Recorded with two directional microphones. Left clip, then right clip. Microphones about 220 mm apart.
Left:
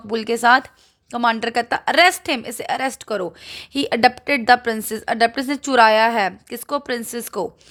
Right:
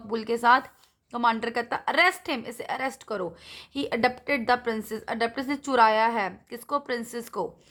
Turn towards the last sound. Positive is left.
turn(degrees=25)  # may be behind; listen again after turning